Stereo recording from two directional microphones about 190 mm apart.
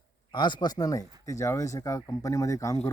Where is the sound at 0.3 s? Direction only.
25° left (ahead or behind).